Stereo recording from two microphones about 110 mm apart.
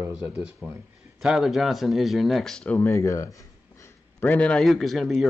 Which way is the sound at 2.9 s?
30° left (ahead or behind).